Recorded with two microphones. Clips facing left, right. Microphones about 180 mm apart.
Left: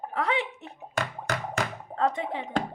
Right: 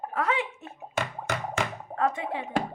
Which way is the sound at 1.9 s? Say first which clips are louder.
Left 1 dB; 20° left (ahead or behind).